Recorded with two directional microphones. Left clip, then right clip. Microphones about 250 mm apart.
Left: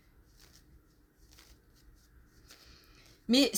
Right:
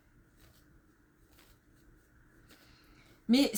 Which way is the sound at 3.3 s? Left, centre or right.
Left.